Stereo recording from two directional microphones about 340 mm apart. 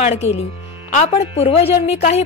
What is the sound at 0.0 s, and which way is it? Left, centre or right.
A woman's voice, centre.